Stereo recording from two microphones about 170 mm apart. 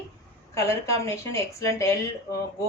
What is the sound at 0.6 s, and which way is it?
A woman's voice, 15° left (ahead or behind).